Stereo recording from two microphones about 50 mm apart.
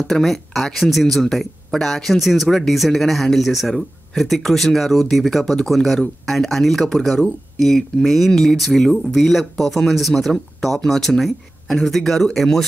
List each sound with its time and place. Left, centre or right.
0.1 s speech: centre